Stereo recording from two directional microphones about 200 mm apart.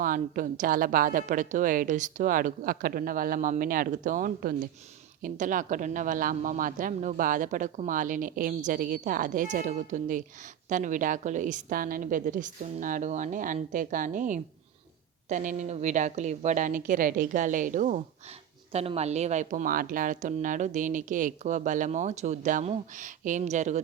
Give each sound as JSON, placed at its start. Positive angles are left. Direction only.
{"t": 0.0, "sound": "a woman's voice", "side_deg": -40}